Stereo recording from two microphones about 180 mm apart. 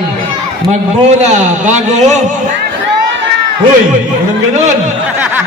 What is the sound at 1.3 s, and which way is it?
Speech, 40° right (ahead or behind).